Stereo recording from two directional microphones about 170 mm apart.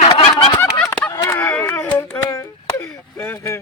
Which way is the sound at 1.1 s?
20° left (ahead or behind).